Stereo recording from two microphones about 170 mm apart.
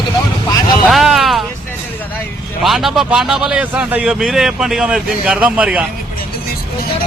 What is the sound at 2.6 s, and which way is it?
A man's voice, centre (ahead or behind).